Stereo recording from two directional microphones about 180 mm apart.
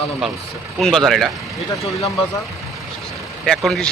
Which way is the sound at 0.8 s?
Centre (ahead or behind).